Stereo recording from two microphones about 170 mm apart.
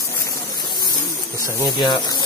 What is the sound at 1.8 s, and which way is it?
Speech, 25° left (ahead or behind).